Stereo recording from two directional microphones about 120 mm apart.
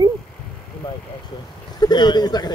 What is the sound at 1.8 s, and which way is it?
Speech, 35° left (ahead or behind).